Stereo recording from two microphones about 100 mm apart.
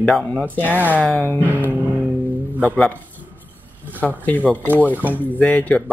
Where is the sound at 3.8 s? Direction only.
15° right (ahead or behind).